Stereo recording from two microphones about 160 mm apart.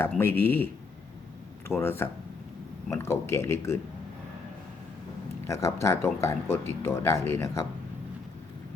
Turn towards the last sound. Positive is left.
turn(degrees=15)  # may be behind; listen again after turning